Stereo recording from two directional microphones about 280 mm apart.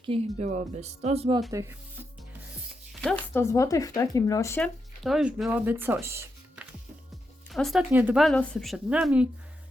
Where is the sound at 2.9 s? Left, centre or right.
Centre.